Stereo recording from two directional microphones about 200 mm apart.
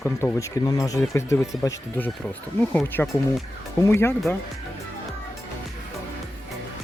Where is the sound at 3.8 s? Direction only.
15° left (ahead or behind).